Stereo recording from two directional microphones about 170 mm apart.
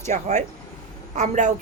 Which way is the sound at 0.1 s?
40° right (ahead or behind).